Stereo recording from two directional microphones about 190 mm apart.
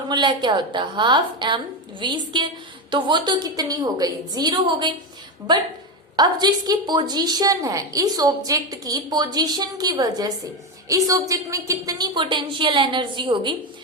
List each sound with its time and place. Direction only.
0.1 s a woman's voice: 25° right (ahead or behind)
6.1 s a woman's voice: 20° right (ahead or behind)